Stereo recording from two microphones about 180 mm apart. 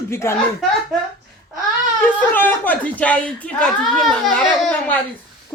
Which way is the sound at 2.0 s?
10° left (ahead or behind).